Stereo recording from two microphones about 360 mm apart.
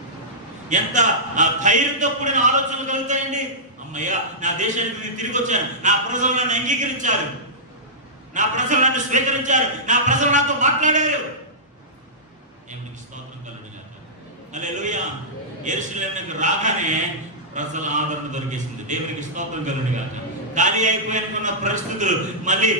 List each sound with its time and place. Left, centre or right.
0.7 s a man's voice: centre
8.3 s a man's voice: right
14.5 s a man's voice: right